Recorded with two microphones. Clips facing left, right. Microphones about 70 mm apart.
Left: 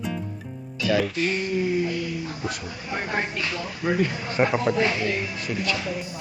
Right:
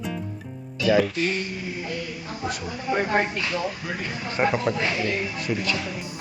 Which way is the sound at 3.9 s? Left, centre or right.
Centre.